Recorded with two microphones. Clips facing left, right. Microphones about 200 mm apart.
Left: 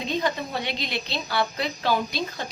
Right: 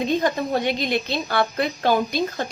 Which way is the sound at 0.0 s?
50° right (ahead or behind).